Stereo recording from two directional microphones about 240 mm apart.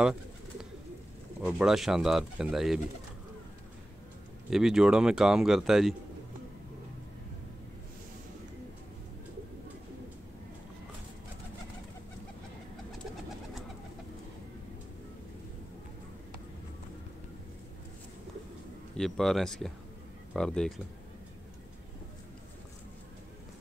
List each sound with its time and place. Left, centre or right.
1.4 s speech: centre
4.5 s speech: centre
18.9 s speech: centre